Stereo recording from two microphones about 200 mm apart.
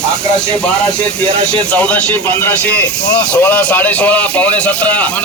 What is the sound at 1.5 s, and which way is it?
A man's voice, 5° left (ahead or behind).